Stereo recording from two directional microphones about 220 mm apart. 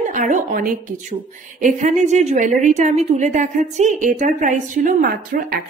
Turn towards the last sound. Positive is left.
turn(degrees=-40)  # may be behind; listen again after turning